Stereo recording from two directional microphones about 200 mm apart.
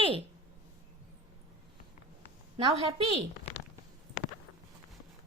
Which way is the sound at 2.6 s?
30° right (ahead or behind).